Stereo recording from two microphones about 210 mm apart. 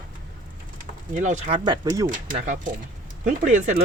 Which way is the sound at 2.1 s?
40° right (ahead or behind).